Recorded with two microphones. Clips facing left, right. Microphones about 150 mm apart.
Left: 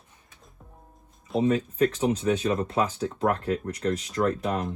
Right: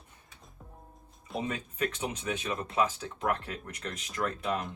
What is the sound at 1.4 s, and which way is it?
Speech, 30° left (ahead or behind).